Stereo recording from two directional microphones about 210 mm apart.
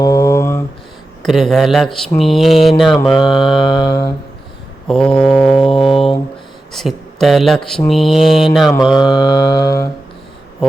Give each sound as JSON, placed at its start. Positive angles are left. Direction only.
{"t": 0.0, "sound": "mantra", "side_deg": 15}
{"t": 1.2, "sound": "mantra", "side_deg": 0}
{"t": 3.2, "sound": "mantra", "side_deg": 20}
{"t": 4.9, "sound": "mantra", "side_deg": 5}
{"t": 5.8, "sound": "a sound", "side_deg": 0}
{"t": 6.7, "sound": "speech", "side_deg": 0}
{"t": 7.9, "sound": "mantra", "side_deg": 0}
{"t": 8.9, "sound": "mantra", "side_deg": 20}